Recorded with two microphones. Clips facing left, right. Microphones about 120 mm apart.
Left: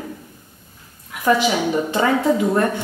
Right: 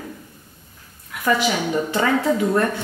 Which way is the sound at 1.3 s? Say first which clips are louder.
Left 3 dB; 15° left (ahead or behind).